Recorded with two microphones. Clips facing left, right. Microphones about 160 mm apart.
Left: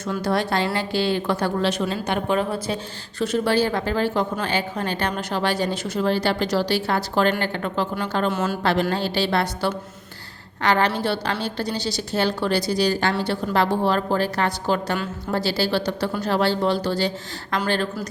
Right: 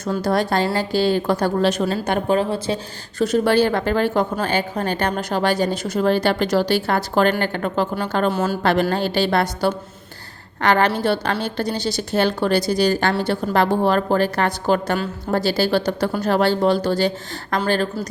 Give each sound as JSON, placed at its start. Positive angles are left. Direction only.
{"t": 0.1, "sound": "a woman's voice", "side_deg": -45}
{"t": 3.2, "sound": "a woman's voice", "side_deg": -45}
{"t": 3.5, "sound": "a woman's voice", "side_deg": -60}
{"t": 8.3, "sound": "speech", "side_deg": -35}
{"t": 8.6, "sound": "a woman's voice", "side_deg": -50}